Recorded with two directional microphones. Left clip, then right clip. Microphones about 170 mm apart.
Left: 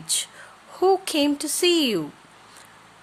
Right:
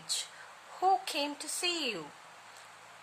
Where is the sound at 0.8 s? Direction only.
45° left (ahead or behind).